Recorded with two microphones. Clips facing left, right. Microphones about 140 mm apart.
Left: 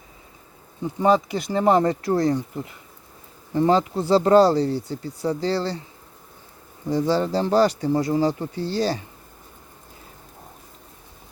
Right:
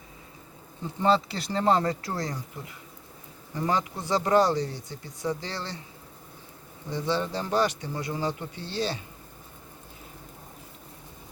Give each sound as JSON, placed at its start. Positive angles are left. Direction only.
{"t": 1.0, "sound": "speech", "side_deg": 15}
{"t": 3.5, "sound": "speech", "side_deg": 30}
{"t": 6.9, "sound": "speech", "side_deg": 40}